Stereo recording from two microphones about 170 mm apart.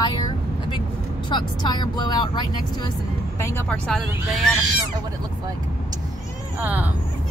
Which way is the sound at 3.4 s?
15° left (ahead or behind).